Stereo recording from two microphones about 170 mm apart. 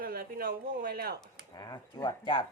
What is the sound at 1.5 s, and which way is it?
Speech, 20° left (ahead or behind).